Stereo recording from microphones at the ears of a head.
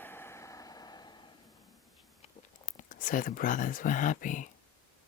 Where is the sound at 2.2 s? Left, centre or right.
Left.